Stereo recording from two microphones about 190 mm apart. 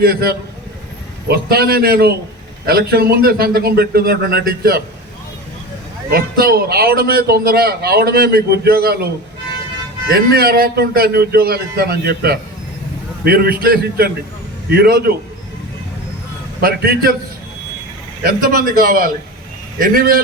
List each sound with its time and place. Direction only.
0.0 s a man's voice: 55° right (ahead or behind)
6.1 s a man's voice: 50° right (ahead or behind)
10.1 s a man's voice: 55° right (ahead or behind)
16.6 s a man's voice: 55° right (ahead or behind)
18.2 s a man's voice: 50° right (ahead or behind)